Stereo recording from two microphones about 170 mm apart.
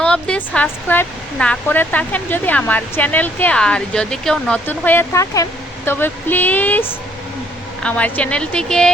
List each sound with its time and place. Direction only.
0.0 s speech: 5° left (ahead or behind)